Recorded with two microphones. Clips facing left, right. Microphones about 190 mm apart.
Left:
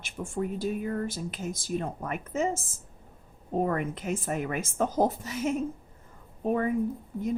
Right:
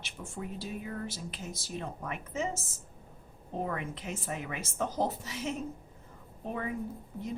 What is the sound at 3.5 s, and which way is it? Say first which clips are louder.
Speech: left 7 dB; 50° left (ahead or behind).